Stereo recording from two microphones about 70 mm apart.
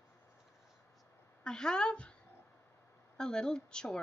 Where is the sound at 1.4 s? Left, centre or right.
Centre.